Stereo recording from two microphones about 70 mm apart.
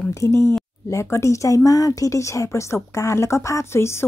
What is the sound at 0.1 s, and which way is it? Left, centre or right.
Speech, left.